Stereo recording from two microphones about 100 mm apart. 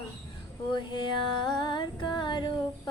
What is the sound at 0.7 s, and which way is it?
Music, 50° left (ahead or behind).